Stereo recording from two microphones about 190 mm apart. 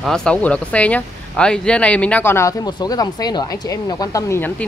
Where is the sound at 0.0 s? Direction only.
5° left (ahead or behind).